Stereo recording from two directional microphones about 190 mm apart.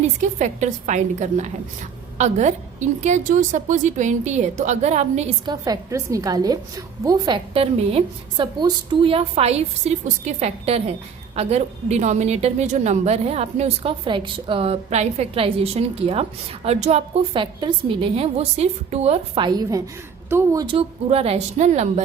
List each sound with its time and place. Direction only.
0.2 s a woman's voice: 40° right (ahead or behind)
5.5 s a woman's voice: 20° right (ahead or behind); by 22.0 s 35° right (ahead or behind)